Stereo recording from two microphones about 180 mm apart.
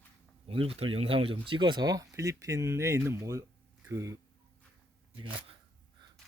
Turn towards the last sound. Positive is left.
turn(degrees=-30)  # may be behind; listen again after turning